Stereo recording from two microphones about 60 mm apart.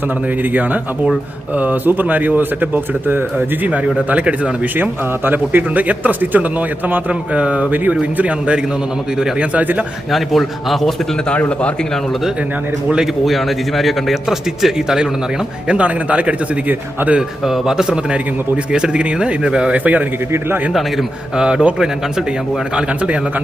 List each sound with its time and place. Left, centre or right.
0.4 s a man's voice: right; by 9.5 s centre
9.5 s speech: right
10.1 s a man's voice: centre
11.3 s a man's voice: left
13.2 s a man's voice: centre
15.6 s speech: right
17.2 s a man's voice: centre
19.8 s speech: right
20.7 s a man's voice: centre
21.4 s a man's voice: centre